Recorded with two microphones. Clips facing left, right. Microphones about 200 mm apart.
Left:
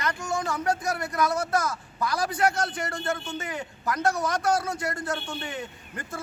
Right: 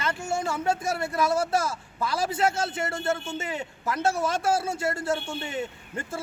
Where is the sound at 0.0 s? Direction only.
25° right (ahead or behind).